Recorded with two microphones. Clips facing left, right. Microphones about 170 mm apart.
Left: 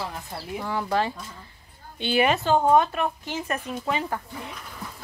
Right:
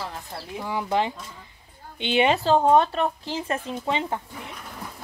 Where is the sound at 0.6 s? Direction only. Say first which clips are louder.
Right 1 dB; 15° right (ahead or behind).